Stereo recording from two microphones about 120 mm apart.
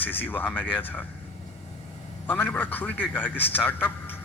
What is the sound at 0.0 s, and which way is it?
Speech, 15° left (ahead or behind).